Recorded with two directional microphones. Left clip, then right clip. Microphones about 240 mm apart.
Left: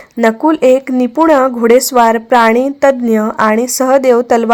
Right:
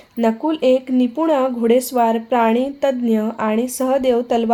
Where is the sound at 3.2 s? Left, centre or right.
Left.